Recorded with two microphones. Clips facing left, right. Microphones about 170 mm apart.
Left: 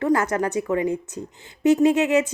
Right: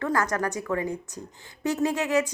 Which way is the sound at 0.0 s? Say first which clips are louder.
Left 5 dB; 20° left (ahead or behind).